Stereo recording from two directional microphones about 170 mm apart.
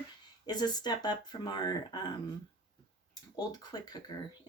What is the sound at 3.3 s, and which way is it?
Speech, 25° left (ahead or behind).